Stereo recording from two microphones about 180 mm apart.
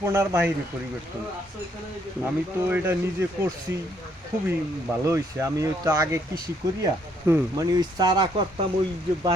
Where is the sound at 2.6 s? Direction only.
10° right (ahead or behind).